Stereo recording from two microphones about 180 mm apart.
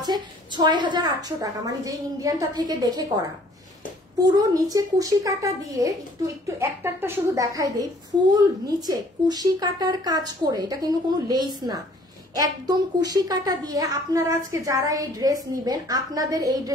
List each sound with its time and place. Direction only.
0.0 s a child's voice: 25° right (ahead or behind)